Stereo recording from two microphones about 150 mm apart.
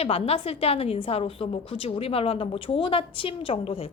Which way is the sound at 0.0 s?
40° left (ahead or behind).